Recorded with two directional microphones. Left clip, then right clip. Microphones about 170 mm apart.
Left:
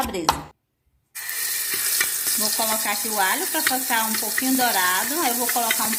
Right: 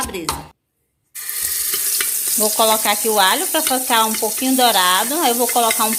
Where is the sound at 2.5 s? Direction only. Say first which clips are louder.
Right 11 dB; 45° right (ahead or behind).